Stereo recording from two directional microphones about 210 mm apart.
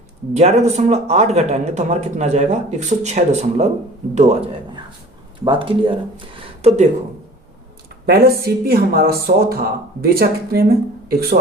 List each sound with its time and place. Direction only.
0.3 s a man's voice: 30° right (ahead or behind)
8.0 s speech: 50° right (ahead or behind)